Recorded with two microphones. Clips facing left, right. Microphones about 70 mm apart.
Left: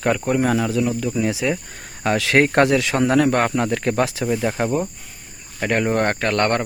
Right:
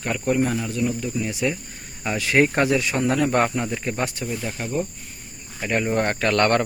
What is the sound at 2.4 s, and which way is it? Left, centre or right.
Speech, left.